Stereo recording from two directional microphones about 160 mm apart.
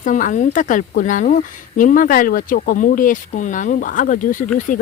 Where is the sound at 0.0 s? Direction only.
55° left (ahead or behind).